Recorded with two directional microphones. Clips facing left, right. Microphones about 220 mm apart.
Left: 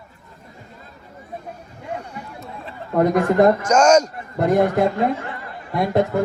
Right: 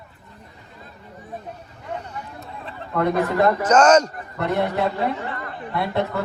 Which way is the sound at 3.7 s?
10° left (ahead or behind).